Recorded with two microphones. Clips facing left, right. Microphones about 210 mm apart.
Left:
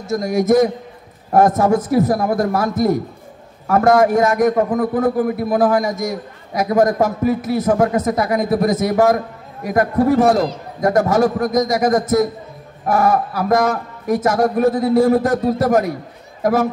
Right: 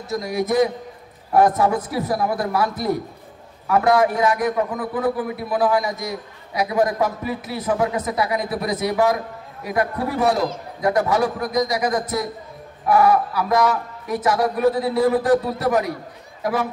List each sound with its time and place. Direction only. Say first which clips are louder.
0.1 s a man's voice: left 7 dB; 45° left (ahead or behind)